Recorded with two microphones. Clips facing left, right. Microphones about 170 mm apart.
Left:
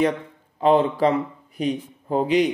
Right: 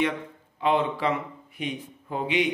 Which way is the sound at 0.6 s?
40° left (ahead or behind).